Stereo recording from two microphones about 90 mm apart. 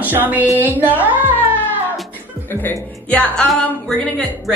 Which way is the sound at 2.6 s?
15° left (ahead or behind).